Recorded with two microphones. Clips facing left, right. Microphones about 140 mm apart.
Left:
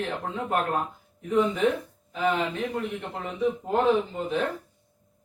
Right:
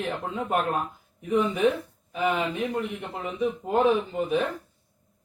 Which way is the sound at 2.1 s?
15° right (ahead or behind).